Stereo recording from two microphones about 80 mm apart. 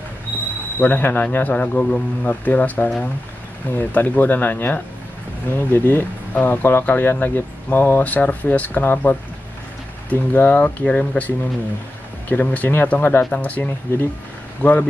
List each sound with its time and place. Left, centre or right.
0.7 s speech: left